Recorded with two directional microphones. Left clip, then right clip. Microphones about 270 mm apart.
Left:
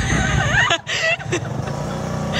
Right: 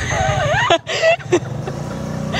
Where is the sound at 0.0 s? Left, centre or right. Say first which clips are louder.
Right 2 dB; centre.